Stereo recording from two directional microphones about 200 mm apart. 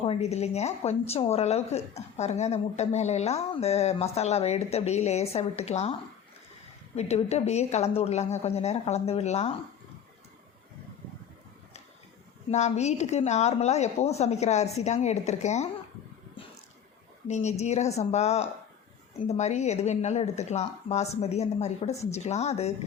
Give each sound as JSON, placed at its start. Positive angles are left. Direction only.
{"t": 0.0, "sound": "a woman's voice", "side_deg": 30}
{"t": 6.9, "sound": "a woman's voice", "side_deg": 35}
{"t": 12.5, "sound": "a woman's voice", "side_deg": 35}
{"t": 17.2, "sound": "a woman's voice", "side_deg": 35}